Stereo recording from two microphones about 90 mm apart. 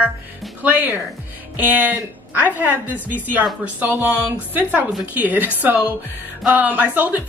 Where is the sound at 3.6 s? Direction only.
20° right (ahead or behind).